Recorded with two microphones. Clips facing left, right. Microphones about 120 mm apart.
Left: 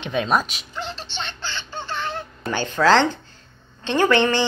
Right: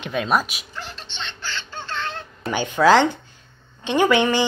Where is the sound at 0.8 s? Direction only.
25° left (ahead or behind).